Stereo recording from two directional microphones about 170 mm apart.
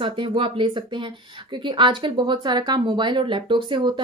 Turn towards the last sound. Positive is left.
turn(degrees=-30)  # may be behind; listen again after turning